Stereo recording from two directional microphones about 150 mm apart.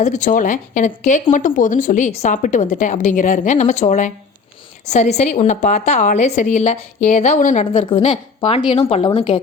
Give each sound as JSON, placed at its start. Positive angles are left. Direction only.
{"t": 0.0, "sound": "a woman's voice", "side_deg": 55}
{"t": 7.7, "sound": "a woman's voice", "side_deg": 35}